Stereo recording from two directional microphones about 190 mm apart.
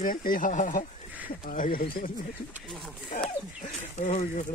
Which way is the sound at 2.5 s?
Centre (ahead or behind).